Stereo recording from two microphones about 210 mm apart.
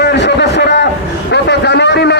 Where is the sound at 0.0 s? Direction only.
55° left (ahead or behind).